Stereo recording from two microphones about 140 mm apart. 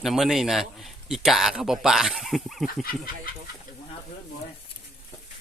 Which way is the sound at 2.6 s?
90° left.